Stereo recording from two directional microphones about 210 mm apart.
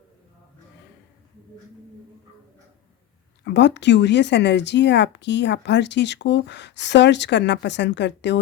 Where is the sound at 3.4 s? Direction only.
55° left (ahead or behind).